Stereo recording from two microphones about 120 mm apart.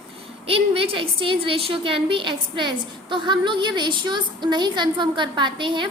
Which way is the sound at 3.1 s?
40° right (ahead or behind).